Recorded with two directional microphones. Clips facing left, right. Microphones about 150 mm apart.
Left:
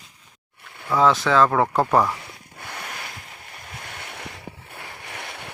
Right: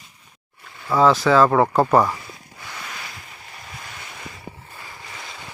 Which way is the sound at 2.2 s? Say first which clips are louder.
Right 1 dB; 60° left (ahead or behind).